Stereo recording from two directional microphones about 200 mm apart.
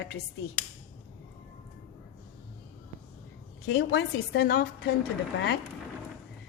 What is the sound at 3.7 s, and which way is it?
A woman's voice, 55° left (ahead or behind).